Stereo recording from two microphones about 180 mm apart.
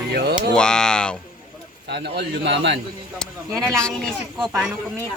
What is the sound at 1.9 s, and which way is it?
Speech, 70° right (ahead or behind).